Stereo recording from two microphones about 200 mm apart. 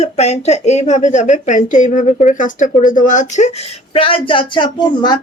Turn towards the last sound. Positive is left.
turn(degrees=20)  # may be behind; listen again after turning